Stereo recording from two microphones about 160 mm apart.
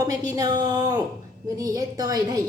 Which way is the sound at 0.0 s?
25° right (ahead or behind).